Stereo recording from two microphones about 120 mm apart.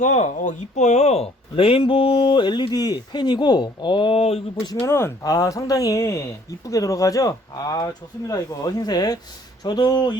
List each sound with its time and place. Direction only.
0.0 s speech: 90° left; by 4.4 s 55° left (ahead or behind)
4.9 s speech: 20° left (ahead or behind); by 10.2 s 35° left (ahead or behind)